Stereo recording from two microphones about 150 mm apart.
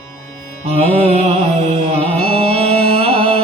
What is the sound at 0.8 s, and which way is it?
Music, 40° right (ahead or behind).